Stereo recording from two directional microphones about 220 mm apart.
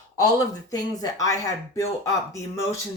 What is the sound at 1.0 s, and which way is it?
Speech, 15° left (ahead or behind).